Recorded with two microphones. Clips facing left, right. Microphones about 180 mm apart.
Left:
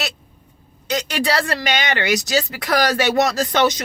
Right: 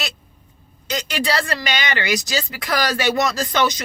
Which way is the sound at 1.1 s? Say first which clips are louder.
Left 1 dB; 55° left (ahead or behind).